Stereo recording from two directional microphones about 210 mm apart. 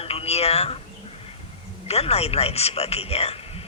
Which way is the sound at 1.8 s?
30° left (ahead or behind).